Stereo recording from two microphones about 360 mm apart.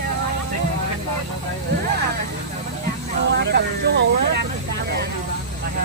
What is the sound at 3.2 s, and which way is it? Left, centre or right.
Vehicle, right.